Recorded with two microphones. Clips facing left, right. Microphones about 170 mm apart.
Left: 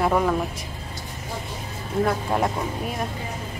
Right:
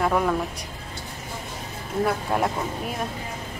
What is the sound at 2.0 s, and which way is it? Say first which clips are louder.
Speech: left 1 dB; centre (ahead or behind).